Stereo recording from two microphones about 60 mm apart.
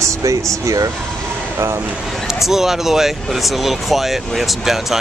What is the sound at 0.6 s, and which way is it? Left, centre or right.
Speech, right.